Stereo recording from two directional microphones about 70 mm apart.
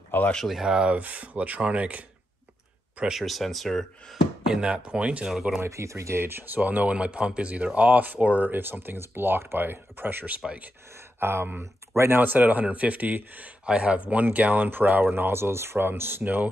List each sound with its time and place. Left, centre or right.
0.1 s speech: left
0.5 s speech: centre
3.2 s speech: centre
4.5 s speech: centre
5.3 s speech: centre
5.6 s speech: right
8.5 s speech: right
11.1 s speech: right